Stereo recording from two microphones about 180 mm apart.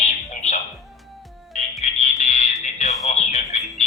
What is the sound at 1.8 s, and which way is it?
Music, 40° left (ahead or behind).